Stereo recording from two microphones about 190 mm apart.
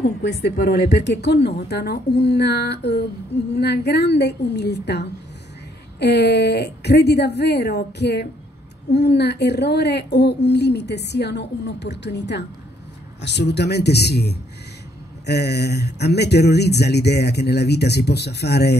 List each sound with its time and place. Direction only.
0.2 s a woman's voice: 60° left (ahead or behind)